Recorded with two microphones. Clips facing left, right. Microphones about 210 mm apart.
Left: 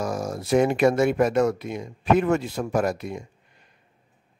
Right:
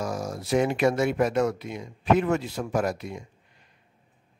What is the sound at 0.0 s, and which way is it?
Speech, 50° left (ahead or behind).